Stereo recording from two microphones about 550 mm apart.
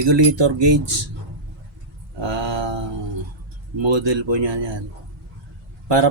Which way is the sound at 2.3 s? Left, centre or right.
Right.